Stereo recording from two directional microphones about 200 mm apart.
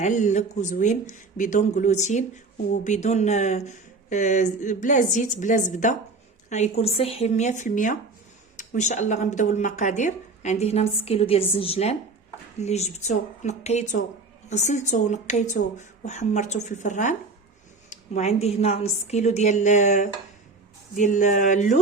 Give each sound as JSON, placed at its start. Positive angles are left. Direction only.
{"t": 0.0, "sound": "speech", "side_deg": 35}